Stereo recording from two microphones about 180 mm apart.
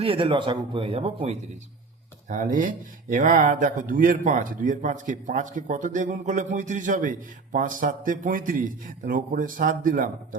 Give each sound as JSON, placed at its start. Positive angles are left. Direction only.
{"t": 0.0, "sound": "speech", "side_deg": -30}
{"t": 2.3, "sound": "speech", "side_deg": -45}